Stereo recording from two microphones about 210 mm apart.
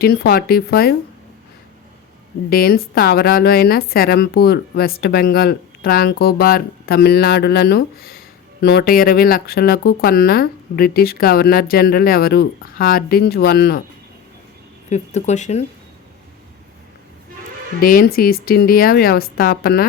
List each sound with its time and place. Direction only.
0.0 s speech: 50° left (ahead or behind)
2.5 s speech: 45° left (ahead or behind)
14.8 s speech: 35° left (ahead or behind)
17.7 s speech: 40° left (ahead or behind)